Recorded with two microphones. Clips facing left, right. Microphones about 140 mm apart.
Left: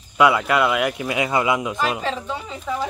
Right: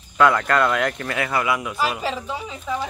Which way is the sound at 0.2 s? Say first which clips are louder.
Left 1 dB; 10° left (ahead or behind).